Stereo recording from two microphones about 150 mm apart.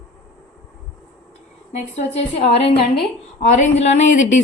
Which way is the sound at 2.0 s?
40° left (ahead or behind).